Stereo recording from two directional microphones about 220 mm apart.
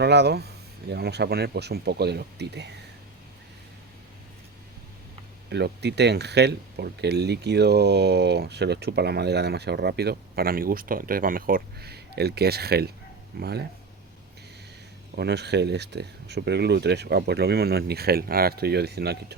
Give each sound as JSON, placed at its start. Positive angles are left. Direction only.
{"t": 0.0, "sound": "speech", "side_deg": -50}
{"t": 5.5, "sound": "speech", "side_deg": -50}
{"t": 15.1, "sound": "speech", "side_deg": -50}